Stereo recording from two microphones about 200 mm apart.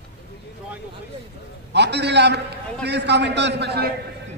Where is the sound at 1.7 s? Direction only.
55° right (ahead or behind).